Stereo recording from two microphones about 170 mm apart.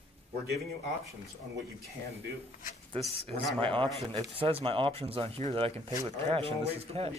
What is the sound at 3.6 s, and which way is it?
Speech, 30° right (ahead or behind).